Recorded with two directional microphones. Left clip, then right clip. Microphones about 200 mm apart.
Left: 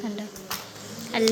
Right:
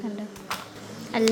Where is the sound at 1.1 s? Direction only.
10° right (ahead or behind).